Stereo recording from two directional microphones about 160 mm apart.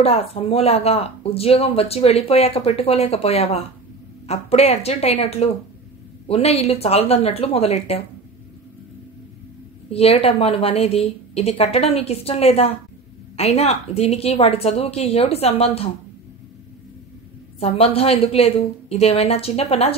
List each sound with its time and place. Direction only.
0.0 s speech: 40° left (ahead or behind)
9.8 s speech: 40° left (ahead or behind)
17.6 s speech: 40° left (ahead or behind)